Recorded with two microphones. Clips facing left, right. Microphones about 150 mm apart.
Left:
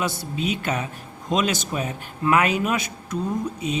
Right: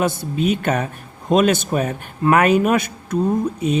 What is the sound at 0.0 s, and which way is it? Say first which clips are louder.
Speech: right 6 dB; 50° right (ahead or behind).